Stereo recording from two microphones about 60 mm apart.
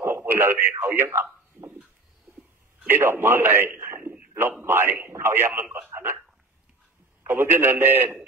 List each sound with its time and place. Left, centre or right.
0.3 s speech: right
2.9 s a man's voice: right
7.2 s a man's voice: right